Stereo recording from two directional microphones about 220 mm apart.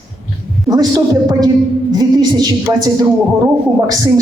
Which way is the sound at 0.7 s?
15° right (ahead or behind).